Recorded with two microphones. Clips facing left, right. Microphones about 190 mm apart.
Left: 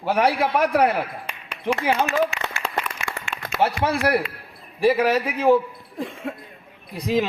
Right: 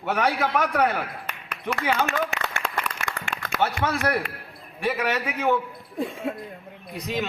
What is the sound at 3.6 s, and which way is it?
A man's voice, 30° left (ahead or behind).